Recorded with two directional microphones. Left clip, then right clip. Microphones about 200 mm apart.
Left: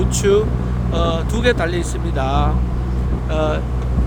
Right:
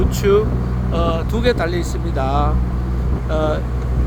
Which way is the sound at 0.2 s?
15° left (ahead or behind).